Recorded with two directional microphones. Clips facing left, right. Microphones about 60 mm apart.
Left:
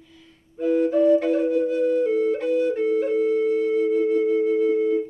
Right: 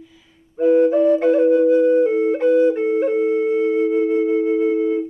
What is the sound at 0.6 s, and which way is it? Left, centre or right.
Flute, right.